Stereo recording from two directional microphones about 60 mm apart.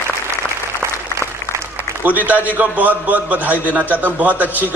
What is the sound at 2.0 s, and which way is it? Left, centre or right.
A man's voice, right.